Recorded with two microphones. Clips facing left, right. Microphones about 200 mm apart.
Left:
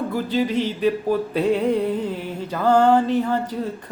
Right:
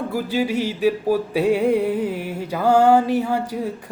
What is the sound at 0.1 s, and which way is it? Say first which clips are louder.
Speech: right 1 dB; 10° right (ahead or behind).